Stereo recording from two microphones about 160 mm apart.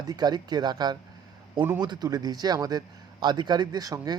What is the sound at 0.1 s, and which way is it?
A man's voice, 25° right (ahead or behind).